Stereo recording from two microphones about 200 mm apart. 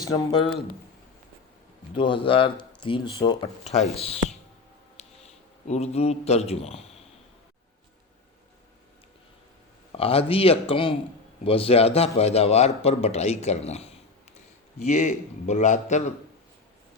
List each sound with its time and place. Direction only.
0.0 s speech: 20° left (ahead or behind)
1.9 s speech: 25° left (ahead or behind)
5.6 s a man's voice: 35° left (ahead or behind)
10.0 s a man's voice: 30° left (ahead or behind)